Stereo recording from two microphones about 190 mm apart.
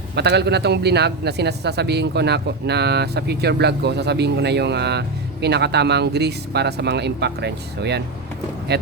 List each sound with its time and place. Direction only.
0.2 s speech: 60° right (ahead or behind)